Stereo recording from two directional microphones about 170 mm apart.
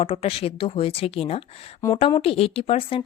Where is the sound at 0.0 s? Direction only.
35° left (ahead or behind).